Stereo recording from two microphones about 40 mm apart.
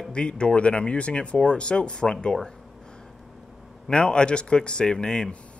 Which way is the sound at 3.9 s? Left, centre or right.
Left.